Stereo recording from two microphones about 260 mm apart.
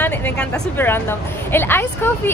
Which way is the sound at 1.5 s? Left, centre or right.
Centre.